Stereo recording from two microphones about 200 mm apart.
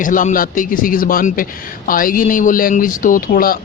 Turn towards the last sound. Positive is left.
turn(degrees=45)  # may be behind; listen again after turning